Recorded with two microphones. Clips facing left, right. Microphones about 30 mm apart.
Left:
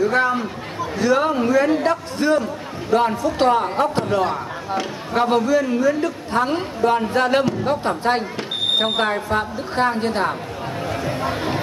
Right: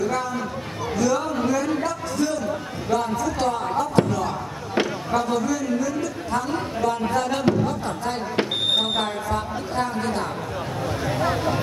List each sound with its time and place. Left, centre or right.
0.0 s a man's voice: left
10.8 s speech: left